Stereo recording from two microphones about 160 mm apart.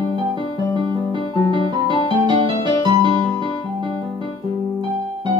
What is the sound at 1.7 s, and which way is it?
Music, 30° right (ahead or behind).